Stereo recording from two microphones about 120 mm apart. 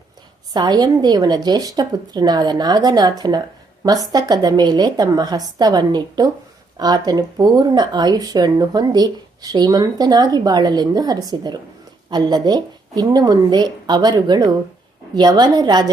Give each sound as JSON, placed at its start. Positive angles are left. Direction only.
{"t": 0.5, "sound": "speech", "side_deg": -35}